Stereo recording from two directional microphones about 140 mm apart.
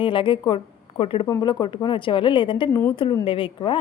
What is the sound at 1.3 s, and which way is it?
A woman's voice, 25° left (ahead or behind).